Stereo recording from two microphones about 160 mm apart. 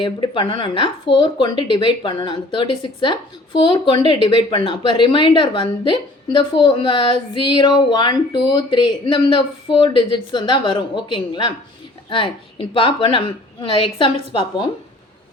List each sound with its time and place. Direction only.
0.0 s a woman's voice: 30° left (ahead or behind)